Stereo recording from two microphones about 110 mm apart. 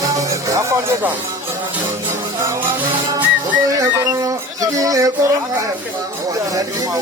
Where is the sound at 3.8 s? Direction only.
30° right (ahead or behind).